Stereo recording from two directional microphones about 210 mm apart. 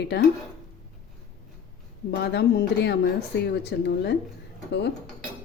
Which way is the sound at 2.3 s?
50° left (ahead or behind).